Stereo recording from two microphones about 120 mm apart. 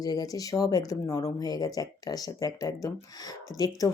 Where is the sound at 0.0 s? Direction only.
30° left (ahead or behind).